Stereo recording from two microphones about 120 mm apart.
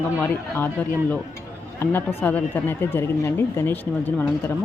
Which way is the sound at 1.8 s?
15° left (ahead or behind).